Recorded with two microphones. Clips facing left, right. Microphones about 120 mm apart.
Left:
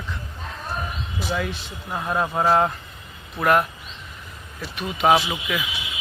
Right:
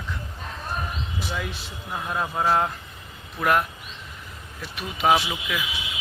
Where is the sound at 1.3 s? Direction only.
5° right (ahead or behind).